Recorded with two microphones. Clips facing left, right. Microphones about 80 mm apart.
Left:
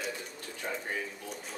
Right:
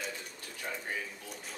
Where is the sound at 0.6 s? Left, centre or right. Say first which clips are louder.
Left 3 dB; left.